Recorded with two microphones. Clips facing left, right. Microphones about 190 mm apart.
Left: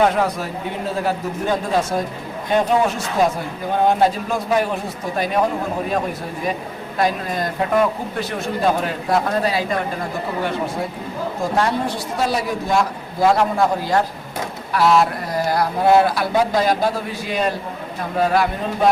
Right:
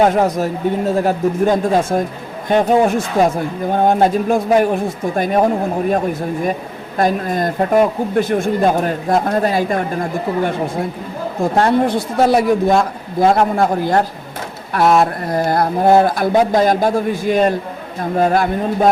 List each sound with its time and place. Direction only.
0.0 s speech: 45° right (ahead or behind)
7.0 s speech: 50° right (ahead or behind)
11.5 s speech: 55° right (ahead or behind)